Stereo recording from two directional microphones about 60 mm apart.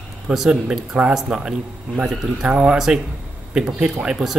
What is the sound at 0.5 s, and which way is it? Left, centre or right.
Speech, centre.